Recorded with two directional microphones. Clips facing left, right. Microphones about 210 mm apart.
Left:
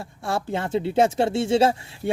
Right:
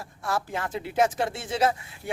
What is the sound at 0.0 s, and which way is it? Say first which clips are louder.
Speech: left 3 dB; 25° left (ahead or behind).